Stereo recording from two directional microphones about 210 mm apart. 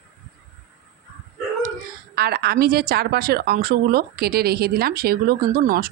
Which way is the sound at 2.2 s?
50° right (ahead or behind).